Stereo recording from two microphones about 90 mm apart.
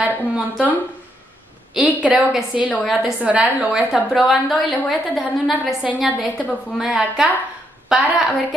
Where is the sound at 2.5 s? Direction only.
5° right (ahead or behind).